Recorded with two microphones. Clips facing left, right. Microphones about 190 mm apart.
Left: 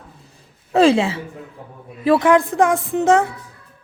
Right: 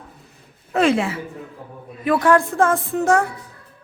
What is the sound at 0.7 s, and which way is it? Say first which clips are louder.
A woman's voice: left 4 dB; 30° left (ahead or behind).